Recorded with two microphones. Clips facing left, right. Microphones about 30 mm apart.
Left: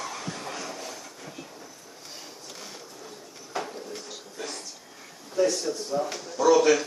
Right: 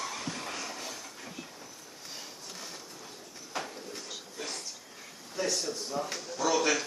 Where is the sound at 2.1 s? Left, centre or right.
Centre.